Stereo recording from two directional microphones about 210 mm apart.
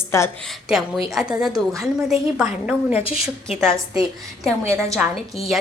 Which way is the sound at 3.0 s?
25° left (ahead or behind).